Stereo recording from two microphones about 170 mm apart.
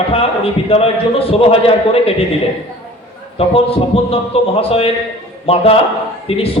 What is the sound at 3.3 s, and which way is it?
A man's voice, 35° left (ahead or behind).